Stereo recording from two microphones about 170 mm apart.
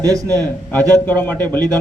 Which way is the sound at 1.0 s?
10° left (ahead or behind).